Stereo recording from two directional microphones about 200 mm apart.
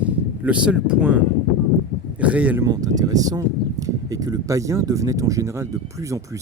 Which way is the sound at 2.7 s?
20° right (ahead or behind).